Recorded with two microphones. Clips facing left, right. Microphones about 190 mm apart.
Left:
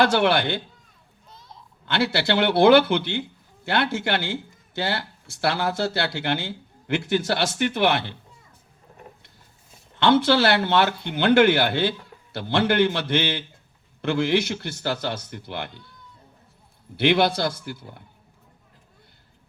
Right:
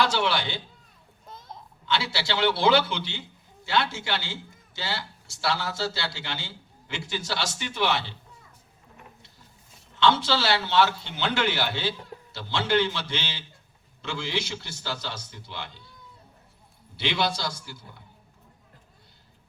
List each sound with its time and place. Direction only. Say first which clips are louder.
0.0 s speech: left 6 dB; 55° left (ahead or behind)
1.3 s a sound: right 4 dB; 50° right (ahead or behind)
1.9 s speech: left 6 dB; 55° left (ahead or behind)
10.0 s speech: left 5 dB; 55° left (ahead or behind)
17.0 s speech: left 8 dB; 55° left (ahead or behind)